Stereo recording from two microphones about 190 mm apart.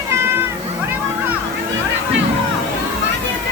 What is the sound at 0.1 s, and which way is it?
Music, 15° right (ahead or behind).